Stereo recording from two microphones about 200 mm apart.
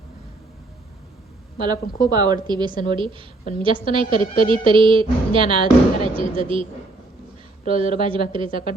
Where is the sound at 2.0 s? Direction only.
20° right (ahead or behind).